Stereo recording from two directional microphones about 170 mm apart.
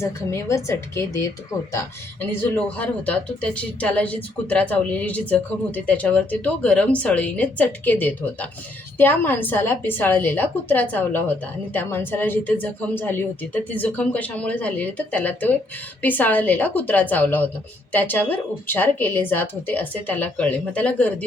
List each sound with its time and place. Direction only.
0.0 s speech: 15° left (ahead or behind)
2.4 s speech: 10° left (ahead or behind)